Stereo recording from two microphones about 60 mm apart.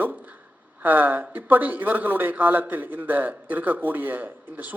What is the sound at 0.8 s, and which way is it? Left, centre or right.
A man's voice, right.